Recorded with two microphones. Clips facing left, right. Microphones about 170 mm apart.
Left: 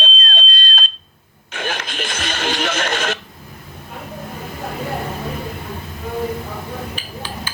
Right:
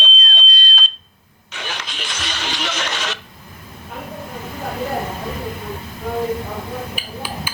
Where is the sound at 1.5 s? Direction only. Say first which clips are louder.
Left 5 dB; 50° left (ahead or behind).